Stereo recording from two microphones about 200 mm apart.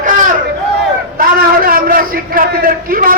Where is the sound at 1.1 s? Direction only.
45° right (ahead or behind).